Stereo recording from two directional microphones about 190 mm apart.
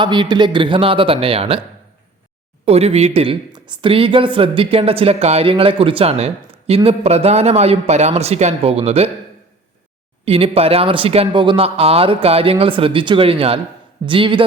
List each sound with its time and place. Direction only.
0.0 s speech: 25° right (ahead or behind)
2.6 s a woman's voice: 35° right (ahead or behind)
10.2 s speech: 30° right (ahead or behind)